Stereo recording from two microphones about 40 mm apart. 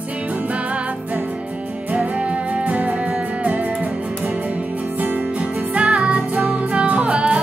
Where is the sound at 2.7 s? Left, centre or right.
Right.